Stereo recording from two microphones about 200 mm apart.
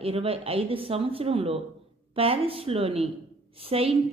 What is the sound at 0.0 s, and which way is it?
A woman's voice, 30° right (ahead or behind).